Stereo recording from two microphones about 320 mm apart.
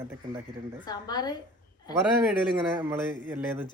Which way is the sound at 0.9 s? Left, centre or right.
Centre.